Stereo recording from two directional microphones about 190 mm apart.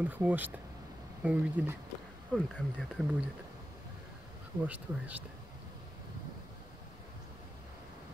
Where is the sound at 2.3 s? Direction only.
5° left (ahead or behind).